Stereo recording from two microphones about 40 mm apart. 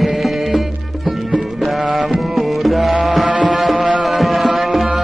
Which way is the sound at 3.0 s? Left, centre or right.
Centre.